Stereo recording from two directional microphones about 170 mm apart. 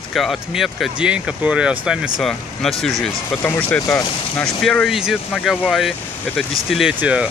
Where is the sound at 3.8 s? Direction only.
20° left (ahead or behind).